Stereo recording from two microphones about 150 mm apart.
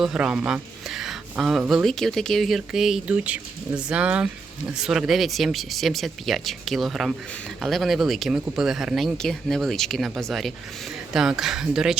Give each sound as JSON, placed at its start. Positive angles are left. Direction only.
{"t": 0.0, "sound": "speech", "side_deg": -5}